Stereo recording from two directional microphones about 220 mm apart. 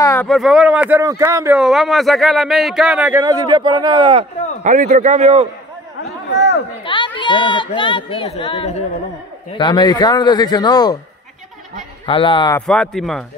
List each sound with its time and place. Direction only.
0.0 s speech: 10° left (ahead or behind); by 4.3 s 25° right (ahead or behind)
4.6 s a man's voice: 35° right (ahead or behind)
6.3 s a sound: 50° left (ahead or behind)
6.8 s speech: 20° left (ahead or behind)
12.1 s speech: 25° left (ahead or behind)
12.6 s speech: 5° left (ahead or behind)